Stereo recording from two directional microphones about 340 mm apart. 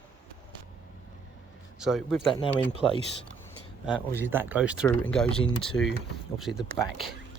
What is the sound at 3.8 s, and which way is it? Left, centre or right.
Speech, centre.